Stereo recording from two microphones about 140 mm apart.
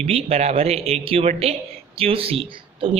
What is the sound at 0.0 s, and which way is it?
Speech, 45° right (ahead or behind).